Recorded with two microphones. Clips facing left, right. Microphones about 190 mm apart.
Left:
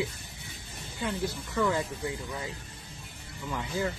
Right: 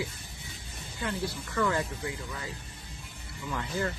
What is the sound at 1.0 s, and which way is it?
Speech, 15° left (ahead or behind).